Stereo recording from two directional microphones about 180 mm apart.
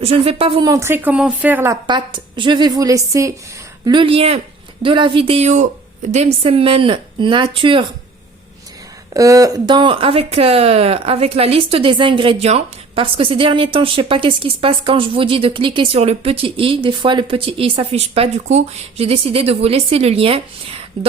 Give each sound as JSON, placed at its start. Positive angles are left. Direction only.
{"t": 0.0, "sound": "speech", "side_deg": -35}
{"t": 0.7, "sound": "a woman's voice", "side_deg": -15}
{"t": 9.1, "sound": "speech", "side_deg": -20}